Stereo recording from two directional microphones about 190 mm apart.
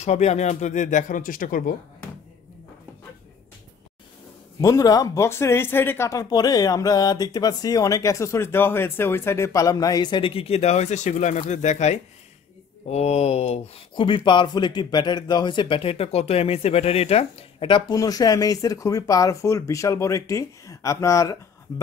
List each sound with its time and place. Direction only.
0.0 s speech: 35° left (ahead or behind)
4.6 s speech: 20° left (ahead or behind)